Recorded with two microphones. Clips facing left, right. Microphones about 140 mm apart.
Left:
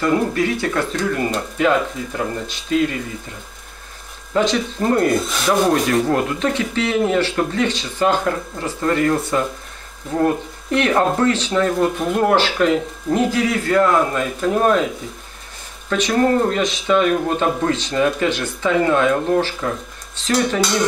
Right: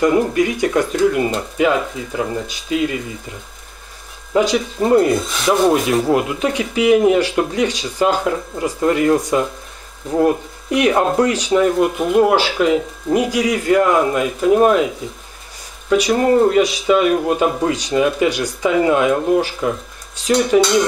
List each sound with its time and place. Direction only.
0.0 s rub: 15° right (ahead or behind)
4.3 s rub: 10° right (ahead or behind)
15.9 s rub: 10° right (ahead or behind)